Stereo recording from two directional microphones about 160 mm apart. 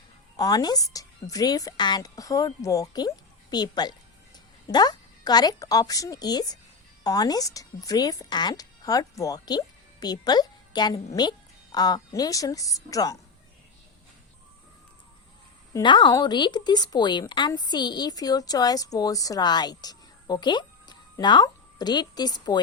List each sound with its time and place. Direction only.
0.3 s a woman's voice: 25° left (ahead or behind)
15.7 s a woman's voice: 30° left (ahead or behind)